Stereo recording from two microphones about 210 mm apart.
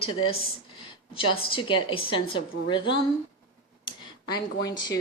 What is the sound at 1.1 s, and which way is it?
A woman's voice, 25° left (ahead or behind).